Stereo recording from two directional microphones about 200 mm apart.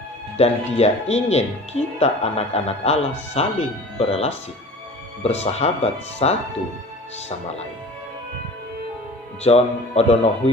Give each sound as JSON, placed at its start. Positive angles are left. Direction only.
{"t": 0.3, "sound": "speech", "side_deg": 30}
{"t": 9.4, "sound": "speech", "side_deg": 30}